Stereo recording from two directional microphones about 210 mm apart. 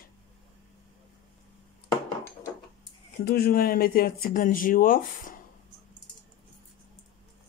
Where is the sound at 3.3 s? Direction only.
45° left (ahead or behind).